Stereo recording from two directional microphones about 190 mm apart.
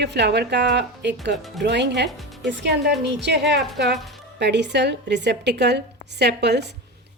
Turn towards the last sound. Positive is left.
turn(degrees=-60)  # may be behind; listen again after turning